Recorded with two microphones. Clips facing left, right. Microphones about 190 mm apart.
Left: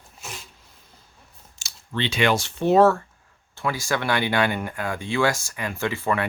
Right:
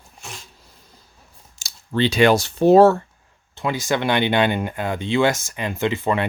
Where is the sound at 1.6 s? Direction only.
40° right (ahead or behind).